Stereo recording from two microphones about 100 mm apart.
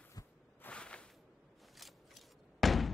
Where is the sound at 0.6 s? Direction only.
10° left (ahead or behind).